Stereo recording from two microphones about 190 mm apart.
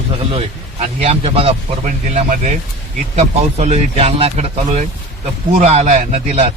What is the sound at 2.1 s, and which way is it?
Speech, 40° right (ahead or behind).